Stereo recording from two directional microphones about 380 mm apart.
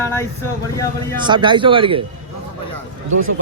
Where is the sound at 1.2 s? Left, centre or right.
Centre.